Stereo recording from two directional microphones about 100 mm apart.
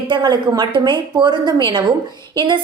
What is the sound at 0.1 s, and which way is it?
A woman's voice, 45° right (ahead or behind).